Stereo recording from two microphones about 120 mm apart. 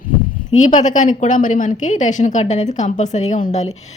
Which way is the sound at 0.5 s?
85° left.